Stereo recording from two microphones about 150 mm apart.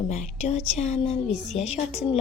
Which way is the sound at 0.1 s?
45° left (ahead or behind).